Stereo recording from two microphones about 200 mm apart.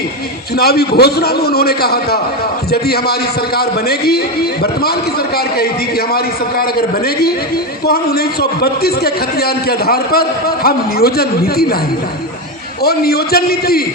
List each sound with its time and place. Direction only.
0.5 s a man's voice: 50° left (ahead or behind)
12.8 s a man's voice: 50° left (ahead or behind)